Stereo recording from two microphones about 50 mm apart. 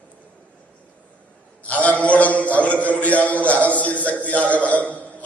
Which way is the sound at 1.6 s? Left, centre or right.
Left.